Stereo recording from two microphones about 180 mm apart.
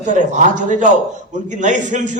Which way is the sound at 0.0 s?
45° right (ahead or behind).